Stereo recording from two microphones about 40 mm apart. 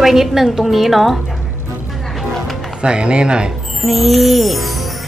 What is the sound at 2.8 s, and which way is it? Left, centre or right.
Speech, right.